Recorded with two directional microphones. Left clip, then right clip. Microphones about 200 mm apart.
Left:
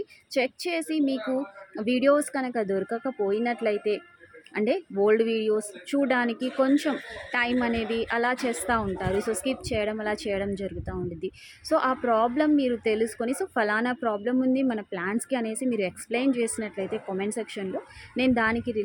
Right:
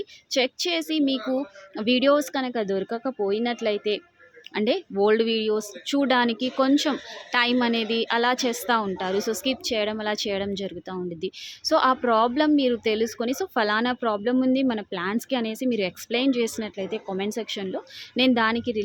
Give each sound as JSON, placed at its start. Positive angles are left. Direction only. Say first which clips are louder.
{"t": 0.3, "sound": "a woman's voice", "louder": "right 3 dB", "side_deg": -10}
{"t": 7.8, "sound": "speech", "louder": "right 3 dB", "side_deg": -65}
{"t": 8.0, "sound": "a woman's voice", "louder": "right 3 dB", "side_deg": -10}